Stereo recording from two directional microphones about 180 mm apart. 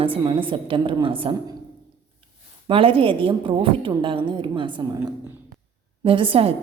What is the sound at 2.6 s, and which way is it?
A woman's voice, 30° right (ahead or behind).